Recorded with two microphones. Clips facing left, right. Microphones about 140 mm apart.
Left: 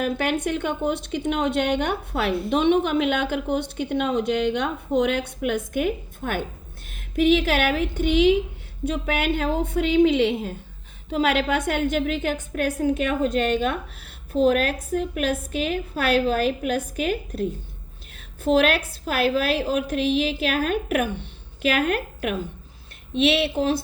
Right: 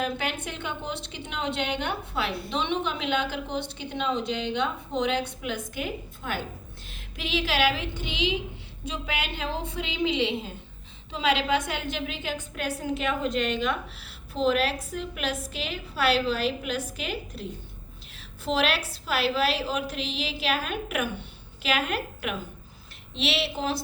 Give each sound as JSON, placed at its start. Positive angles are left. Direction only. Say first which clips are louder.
{"t": 0.0, "sound": "a woman's voice", "louder": "left 6 dB", "side_deg": 50}
{"t": 18.4, "sound": "a woman's voice", "louder": "left 7 dB", "side_deg": 50}